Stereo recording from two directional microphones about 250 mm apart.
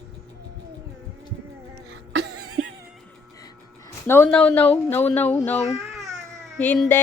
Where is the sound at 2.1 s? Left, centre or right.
Right.